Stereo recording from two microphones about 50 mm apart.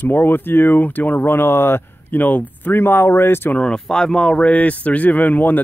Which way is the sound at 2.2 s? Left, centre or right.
Left.